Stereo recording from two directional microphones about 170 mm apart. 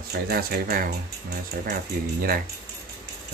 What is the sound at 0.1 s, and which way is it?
Speech, 65° right (ahead or behind).